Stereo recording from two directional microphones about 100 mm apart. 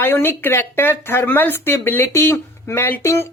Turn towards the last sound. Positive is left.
turn(degrees=25)  # may be behind; listen again after turning